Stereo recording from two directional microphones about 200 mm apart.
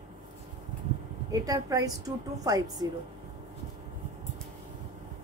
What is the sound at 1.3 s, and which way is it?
A woman's voice, 15° right (ahead or behind).